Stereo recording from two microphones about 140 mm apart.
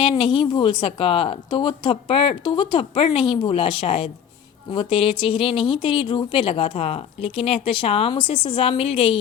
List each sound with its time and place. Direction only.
0.0 s speech: 35° left (ahead or behind)